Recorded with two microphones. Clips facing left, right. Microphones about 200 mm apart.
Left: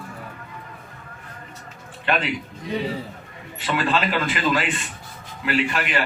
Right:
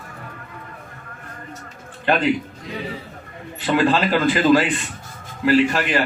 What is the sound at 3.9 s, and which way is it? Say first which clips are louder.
Speech: right 5 dB; 35° right (ahead or behind).